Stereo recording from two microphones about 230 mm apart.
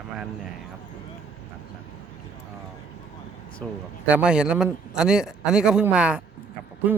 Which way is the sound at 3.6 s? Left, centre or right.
Centre.